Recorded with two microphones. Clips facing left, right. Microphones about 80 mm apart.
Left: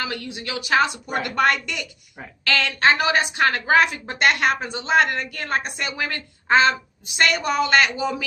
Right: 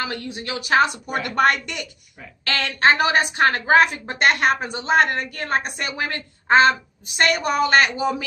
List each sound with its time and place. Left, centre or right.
0.0 s a woman's voice: right